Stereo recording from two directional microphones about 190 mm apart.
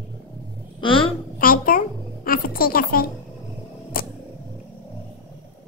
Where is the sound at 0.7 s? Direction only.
25° left (ahead or behind).